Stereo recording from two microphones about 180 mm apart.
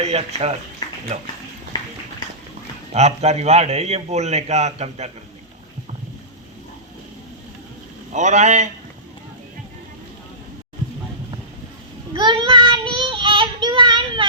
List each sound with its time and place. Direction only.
0.0 s a man's voice: 35° right (ahead or behind)
1.7 s a sound: 20° left (ahead or behind)
2.9 s a man's voice: 35° right (ahead or behind)
8.1 s a man's voice: 40° right (ahead or behind)
12.1 s child singing: 25° right (ahead or behind)